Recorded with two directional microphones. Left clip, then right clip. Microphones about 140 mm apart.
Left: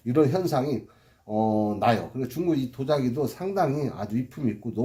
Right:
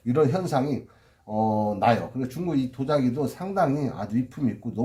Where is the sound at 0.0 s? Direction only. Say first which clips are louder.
Even; 30° left (ahead or behind).